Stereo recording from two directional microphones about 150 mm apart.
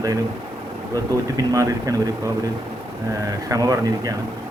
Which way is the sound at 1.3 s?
25° right (ahead or behind).